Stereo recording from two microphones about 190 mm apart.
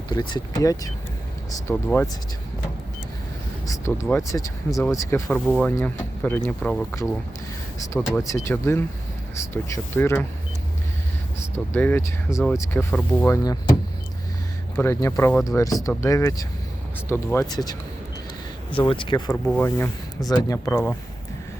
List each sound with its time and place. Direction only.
0.1 s speech: 20° left (ahead or behind)
3.7 s speech: 15° left (ahead or behind)
5.5 s speech: 5° left (ahead or behind)
7.9 s speech: 5° left (ahead or behind)
11.5 s speech: 10° left (ahead or behind)
14.8 s speech: 15° left (ahead or behind)
18.9 s speech: 25° left (ahead or behind)
19.5 s speech: 10° left (ahead or behind)